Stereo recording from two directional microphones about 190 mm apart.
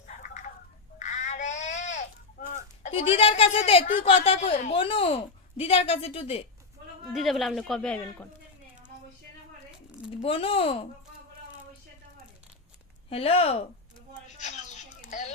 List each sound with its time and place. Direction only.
0.1 s a sound: 40° left (ahead or behind)
2.8 s a woman's voice: 30° left (ahead or behind)
7.1 s speech: centre (ahead or behind)
10.2 s a woman's voice: 30° left (ahead or behind)
13.1 s a woman's voice: 30° left (ahead or behind)